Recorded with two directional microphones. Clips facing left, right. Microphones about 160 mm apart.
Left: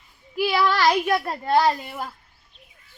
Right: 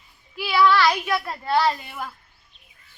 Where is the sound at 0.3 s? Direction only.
40° left (ahead or behind).